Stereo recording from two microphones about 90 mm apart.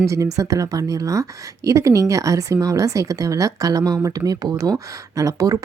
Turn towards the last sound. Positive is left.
turn(degrees=-40)  # may be behind; listen again after turning